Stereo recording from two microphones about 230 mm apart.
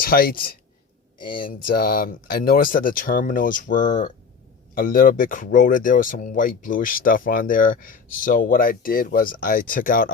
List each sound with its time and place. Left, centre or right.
0.0 s speech: left
1.7 s speech: left